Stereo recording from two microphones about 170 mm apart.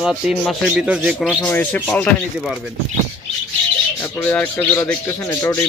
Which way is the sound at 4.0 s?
10° left (ahead or behind).